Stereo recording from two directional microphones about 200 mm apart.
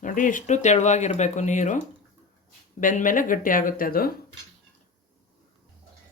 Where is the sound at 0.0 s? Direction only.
40° left (ahead or behind).